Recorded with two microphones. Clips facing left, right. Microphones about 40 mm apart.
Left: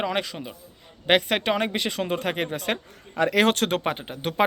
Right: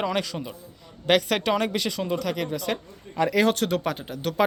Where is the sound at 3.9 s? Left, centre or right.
Left.